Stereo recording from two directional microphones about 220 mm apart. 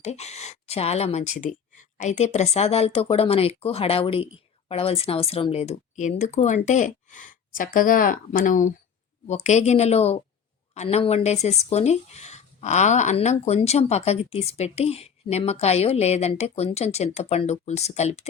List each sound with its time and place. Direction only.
0.0 s speech: 30° left (ahead or behind)